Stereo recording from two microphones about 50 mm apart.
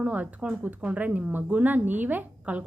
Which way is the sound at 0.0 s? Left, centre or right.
Right.